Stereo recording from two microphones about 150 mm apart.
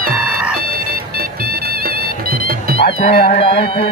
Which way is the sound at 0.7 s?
90° right.